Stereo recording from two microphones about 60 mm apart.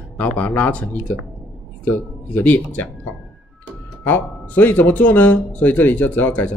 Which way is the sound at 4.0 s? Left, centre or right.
Left.